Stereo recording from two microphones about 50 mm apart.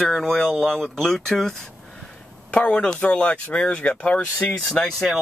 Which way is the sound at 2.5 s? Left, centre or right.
Left.